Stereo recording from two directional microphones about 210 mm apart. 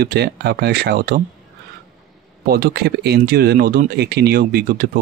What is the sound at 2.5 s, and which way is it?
Speech, 45° right (ahead or behind).